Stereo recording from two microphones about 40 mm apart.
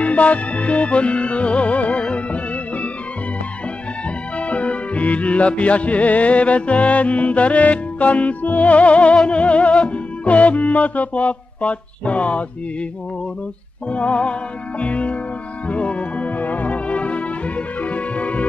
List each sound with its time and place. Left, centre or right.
0.0 s music: left
4.4 s music: left
13.8 s music: left